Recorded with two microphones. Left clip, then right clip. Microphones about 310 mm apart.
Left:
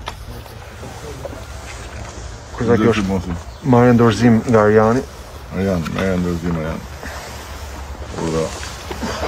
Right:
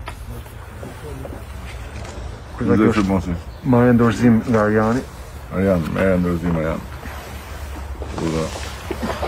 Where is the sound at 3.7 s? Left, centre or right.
Left.